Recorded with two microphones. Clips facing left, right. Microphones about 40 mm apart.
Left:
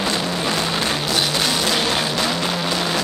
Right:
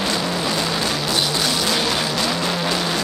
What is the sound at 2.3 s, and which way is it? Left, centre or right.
Vehicle, centre.